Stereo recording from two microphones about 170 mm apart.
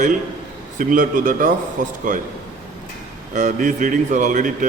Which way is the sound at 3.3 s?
50° right (ahead or behind).